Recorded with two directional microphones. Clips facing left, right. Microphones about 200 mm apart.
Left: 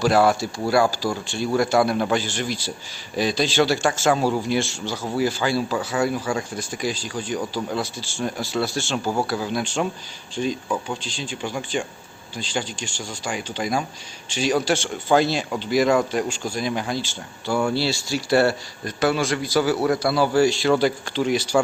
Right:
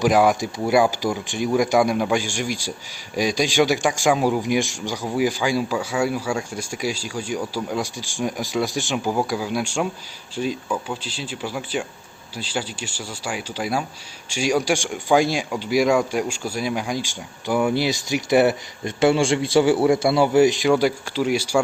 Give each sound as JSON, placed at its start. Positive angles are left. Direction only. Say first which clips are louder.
{"t": 0.0, "sound": "a man's voice", "louder": "right 1 dB", "side_deg": -15}